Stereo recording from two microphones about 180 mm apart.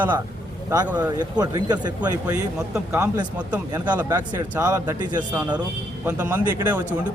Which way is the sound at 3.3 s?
10° right (ahead or behind).